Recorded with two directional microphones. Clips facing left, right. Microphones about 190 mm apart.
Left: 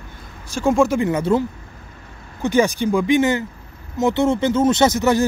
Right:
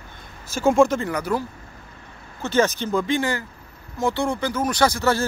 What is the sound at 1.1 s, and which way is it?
Speech, 25° left (ahead or behind).